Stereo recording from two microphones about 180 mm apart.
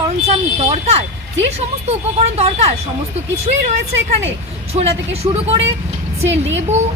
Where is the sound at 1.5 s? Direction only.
35° right (ahead or behind).